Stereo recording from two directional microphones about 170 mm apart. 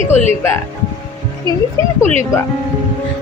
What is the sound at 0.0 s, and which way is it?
Speech, 45° left (ahead or behind).